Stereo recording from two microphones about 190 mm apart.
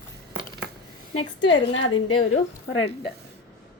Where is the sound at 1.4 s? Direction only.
75° left (ahead or behind).